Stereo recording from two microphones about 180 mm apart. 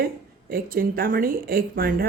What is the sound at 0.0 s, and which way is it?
Speech, 55° right (ahead or behind).